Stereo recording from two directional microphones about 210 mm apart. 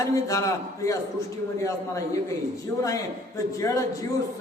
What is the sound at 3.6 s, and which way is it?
Speech, 15° left (ahead or behind).